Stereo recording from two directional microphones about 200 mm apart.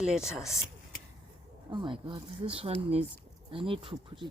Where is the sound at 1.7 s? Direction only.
25° right (ahead or behind).